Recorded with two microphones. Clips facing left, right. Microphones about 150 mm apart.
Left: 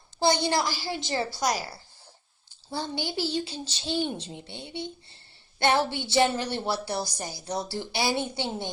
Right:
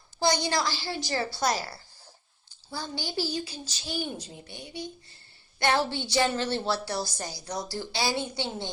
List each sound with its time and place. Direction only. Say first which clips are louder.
0.4 s a child's voice: left 2 dB; 20° left (ahead or behind)